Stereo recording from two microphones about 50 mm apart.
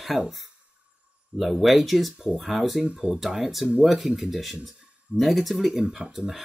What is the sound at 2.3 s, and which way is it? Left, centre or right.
Speech, centre.